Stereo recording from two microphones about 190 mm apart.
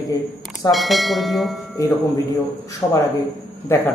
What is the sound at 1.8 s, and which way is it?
A man's voice, 15° left (ahead or behind).